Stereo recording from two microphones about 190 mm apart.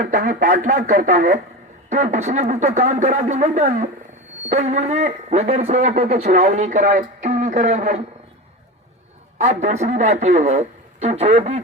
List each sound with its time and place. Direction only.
0.0 s speech: 45° right (ahead or behind)
9.4 s speech: 35° right (ahead or behind)